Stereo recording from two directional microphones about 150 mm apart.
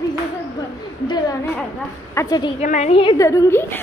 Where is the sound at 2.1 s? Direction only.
25° left (ahead or behind).